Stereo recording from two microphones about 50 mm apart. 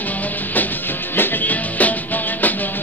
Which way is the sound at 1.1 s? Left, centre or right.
Left.